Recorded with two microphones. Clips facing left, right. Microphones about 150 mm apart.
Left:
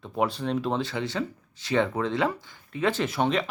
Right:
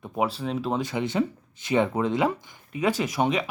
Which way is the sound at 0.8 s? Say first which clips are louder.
Right 4 dB; 15° right (ahead or behind).